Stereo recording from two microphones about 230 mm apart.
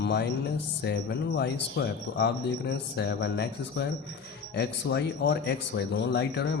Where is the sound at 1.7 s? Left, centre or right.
Left.